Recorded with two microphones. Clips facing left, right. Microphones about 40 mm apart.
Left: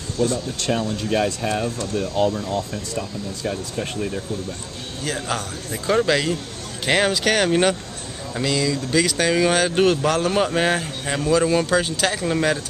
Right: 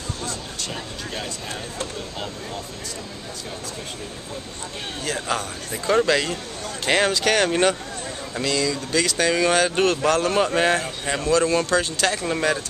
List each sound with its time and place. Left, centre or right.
0.7 s speech: left
5.0 s speech: centre